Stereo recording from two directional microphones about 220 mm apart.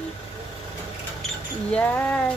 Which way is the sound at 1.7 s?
10° left (ahead or behind).